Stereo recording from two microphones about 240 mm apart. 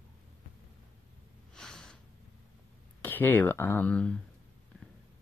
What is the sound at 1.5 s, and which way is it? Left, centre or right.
Snort, centre.